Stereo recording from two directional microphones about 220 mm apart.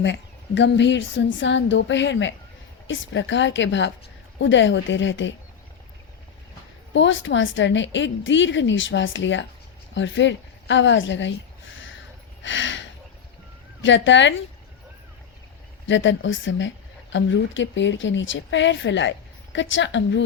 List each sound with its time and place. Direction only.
0.0 s a woman's voice: 55° left (ahead or behind)
6.9 s a woman's voice: 60° left (ahead or behind)
12.4 s a sound: 55° left (ahead or behind)
13.8 s a woman's voice: 55° left (ahead or behind)
15.9 s a woman's voice: 55° left (ahead or behind)